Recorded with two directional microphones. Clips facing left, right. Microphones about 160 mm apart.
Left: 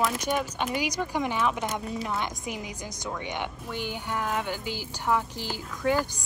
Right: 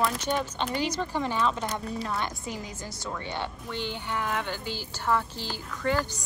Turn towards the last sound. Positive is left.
turn(degrees=15)  # may be behind; listen again after turning